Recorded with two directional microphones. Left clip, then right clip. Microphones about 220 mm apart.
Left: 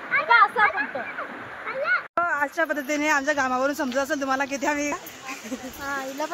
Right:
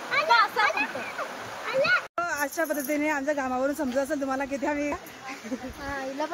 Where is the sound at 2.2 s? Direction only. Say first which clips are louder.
Left 5 dB; 5° right (ahead or behind).